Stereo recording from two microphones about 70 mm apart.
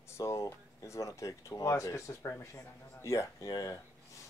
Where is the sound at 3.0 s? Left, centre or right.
Left.